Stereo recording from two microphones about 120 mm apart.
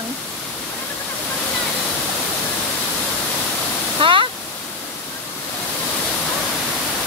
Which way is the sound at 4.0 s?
45° right (ahead or behind).